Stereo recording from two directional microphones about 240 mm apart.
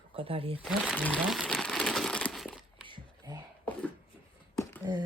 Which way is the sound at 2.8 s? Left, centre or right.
Centre.